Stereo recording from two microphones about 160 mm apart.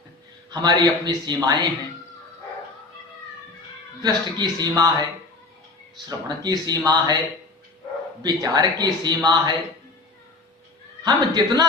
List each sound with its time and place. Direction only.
0.5 s a man's voice: 25° right (ahead or behind)
4.0 s a man's voice: 25° right (ahead or behind)
6.1 s a man's voice: 25° right (ahead or behind)
8.2 s a man's voice: 25° right (ahead or behind)
11.4 s a man's voice: 30° right (ahead or behind)